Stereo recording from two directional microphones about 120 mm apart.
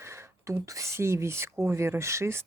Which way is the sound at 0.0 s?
25° right (ahead or behind).